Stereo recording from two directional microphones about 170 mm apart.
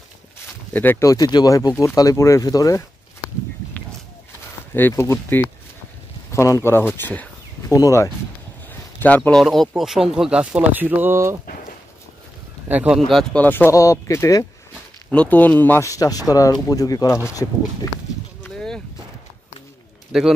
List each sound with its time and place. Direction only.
0.7 s speech: 15° left (ahead or behind)
4.7 s speech: 15° left (ahead or behind)
9.0 s speech: 10° left (ahead or behind); by 11.3 s 15° right (ahead or behind)
12.6 s speech: 10° right (ahead or behind); by 18.0 s 20° left (ahead or behind)
18.4 s boat: 5° left (ahead or behind)
20.1 s speech: 5° right (ahead or behind)